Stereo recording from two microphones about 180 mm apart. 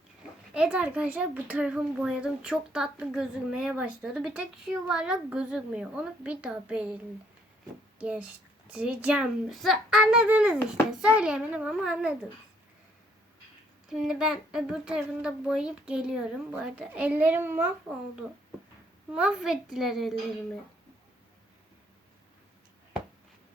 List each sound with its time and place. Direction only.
0.5 s a woman's voice: 5° right (ahead or behind)
13.9 s a woman's voice: 5° right (ahead or behind)